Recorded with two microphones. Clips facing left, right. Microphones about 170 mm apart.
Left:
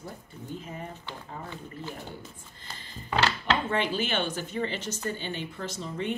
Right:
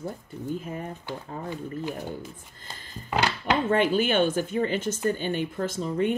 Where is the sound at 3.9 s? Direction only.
50° right (ahead or behind).